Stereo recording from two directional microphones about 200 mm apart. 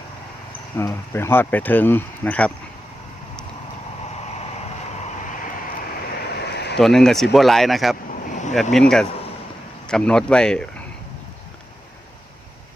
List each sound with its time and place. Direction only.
0.8 s speech: 15° left (ahead or behind)
4.4 s vehicle: 35° left (ahead or behind)
6.2 s a sound: 55° left (ahead or behind)
6.7 s speech: centre (ahead or behind)
8.1 s vehicle: 35° left (ahead or behind)
8.7 s a man's voice: 5° left (ahead or behind)